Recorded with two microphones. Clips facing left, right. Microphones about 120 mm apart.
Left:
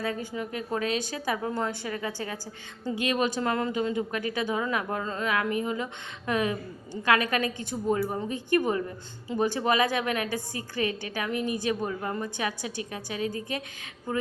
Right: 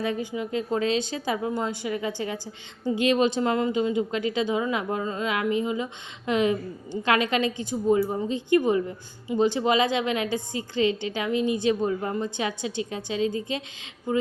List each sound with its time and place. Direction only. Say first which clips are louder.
0.0 s speech: right 3 dB; 20° right (ahead or behind)